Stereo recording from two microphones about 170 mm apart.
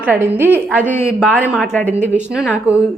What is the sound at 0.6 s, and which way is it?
Speech, 10° left (ahead or behind).